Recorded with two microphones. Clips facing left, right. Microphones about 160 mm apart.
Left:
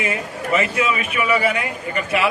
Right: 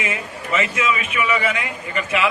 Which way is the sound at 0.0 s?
35° left (ahead or behind).